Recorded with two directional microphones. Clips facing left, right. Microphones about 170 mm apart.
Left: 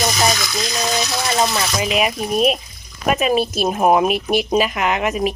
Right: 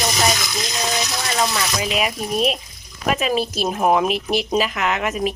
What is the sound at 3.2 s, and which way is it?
Speech, 55° left (ahead or behind).